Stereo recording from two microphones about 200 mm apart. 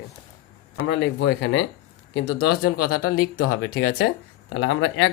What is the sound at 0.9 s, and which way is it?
Speech, 65° left (ahead or behind).